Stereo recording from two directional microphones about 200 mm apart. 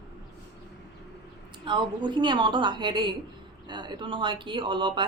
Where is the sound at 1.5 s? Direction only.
25° right (ahead or behind).